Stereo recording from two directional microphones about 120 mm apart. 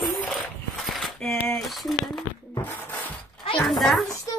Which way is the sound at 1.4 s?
Centre (ahead or behind).